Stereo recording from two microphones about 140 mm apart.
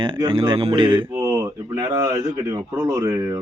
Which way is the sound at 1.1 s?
20° right (ahead or behind).